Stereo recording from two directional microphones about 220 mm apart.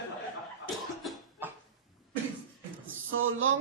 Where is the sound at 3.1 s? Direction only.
65° right (ahead or behind).